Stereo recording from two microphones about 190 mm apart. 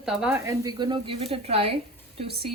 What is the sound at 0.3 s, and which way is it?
A woman's voice, 15° right (ahead or behind).